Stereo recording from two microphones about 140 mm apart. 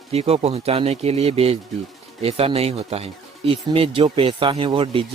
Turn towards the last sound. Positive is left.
turn(degrees=-40)  # may be behind; listen again after turning